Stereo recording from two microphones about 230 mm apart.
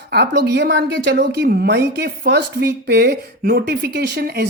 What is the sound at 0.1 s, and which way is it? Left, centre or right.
Speech, right.